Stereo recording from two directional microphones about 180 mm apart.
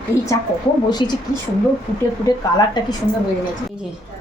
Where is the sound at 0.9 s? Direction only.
25° left (ahead or behind).